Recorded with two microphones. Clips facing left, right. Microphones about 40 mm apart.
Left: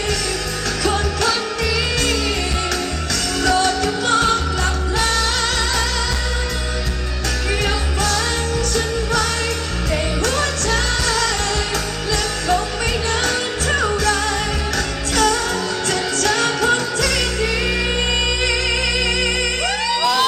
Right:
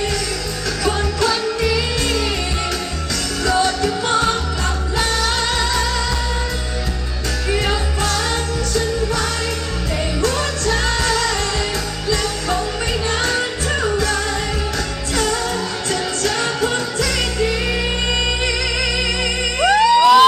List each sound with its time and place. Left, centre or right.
1.6 s music: centre
15.9 s music: left
19.6 s music: centre